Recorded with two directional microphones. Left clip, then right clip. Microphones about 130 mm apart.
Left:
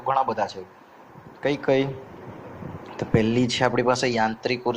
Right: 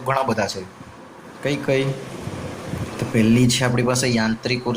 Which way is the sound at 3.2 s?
45° left (ahead or behind).